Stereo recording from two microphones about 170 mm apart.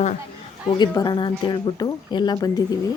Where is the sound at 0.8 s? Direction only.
25° left (ahead or behind).